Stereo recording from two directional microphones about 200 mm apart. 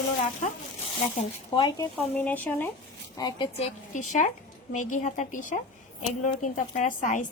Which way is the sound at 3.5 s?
35° left (ahead or behind).